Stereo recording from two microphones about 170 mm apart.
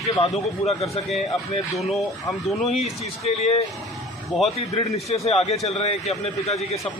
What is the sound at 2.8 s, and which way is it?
Speech, 40° left (ahead or behind).